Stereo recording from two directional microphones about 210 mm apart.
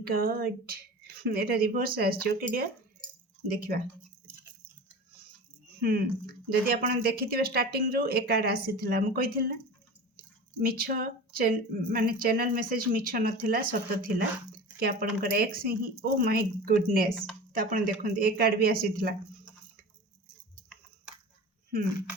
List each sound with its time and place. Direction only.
0.0 s speech: 45° right (ahead or behind)
5.8 s speech: 45° right (ahead or behind)
10.6 s speech: 45° right (ahead or behind)